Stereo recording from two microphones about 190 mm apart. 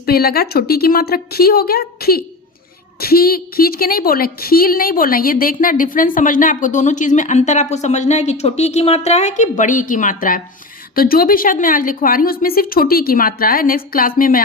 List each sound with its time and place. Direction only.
0.0 s a woman's voice: 55° left (ahead or behind)